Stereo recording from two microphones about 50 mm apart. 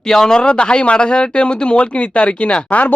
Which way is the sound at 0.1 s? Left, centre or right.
Centre.